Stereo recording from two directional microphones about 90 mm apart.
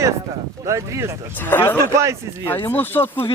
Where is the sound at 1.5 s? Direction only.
25° left (ahead or behind).